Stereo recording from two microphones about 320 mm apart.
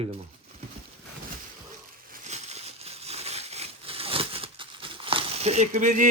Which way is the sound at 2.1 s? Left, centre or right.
Right.